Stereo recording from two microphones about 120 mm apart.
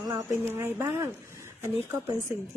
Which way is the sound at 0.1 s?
25° right (ahead or behind).